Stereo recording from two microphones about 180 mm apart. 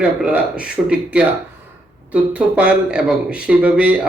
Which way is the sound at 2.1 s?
5° right (ahead or behind).